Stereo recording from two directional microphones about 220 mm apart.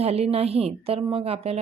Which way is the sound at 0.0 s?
30° right (ahead or behind).